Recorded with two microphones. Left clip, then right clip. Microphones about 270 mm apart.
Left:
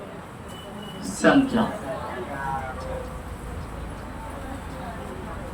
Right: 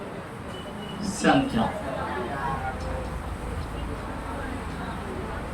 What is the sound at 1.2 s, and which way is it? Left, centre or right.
Speech, centre.